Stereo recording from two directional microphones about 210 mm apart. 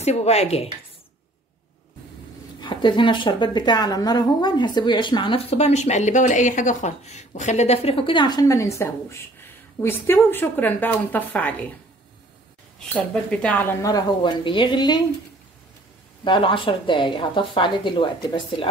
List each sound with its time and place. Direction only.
0.0 s speech: 30° left (ahead or behind)
2.6 s speech: 20° left (ahead or behind)
13.1 s speech: 5° left (ahead or behind); by 15.0 s 20° left (ahead or behind)
16.3 s speech: 25° left (ahead or behind)